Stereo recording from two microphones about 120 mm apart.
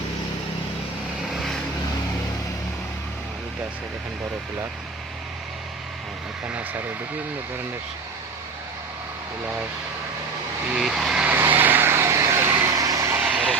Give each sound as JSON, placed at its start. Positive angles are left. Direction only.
{"t": 6.5, "sound": "speech", "side_deg": -15}
{"t": 10.8, "sound": "vehicle", "side_deg": -5}
{"t": 11.3, "sound": "vehicle", "side_deg": -15}
{"t": 13.2, "sound": "vehicle", "side_deg": -5}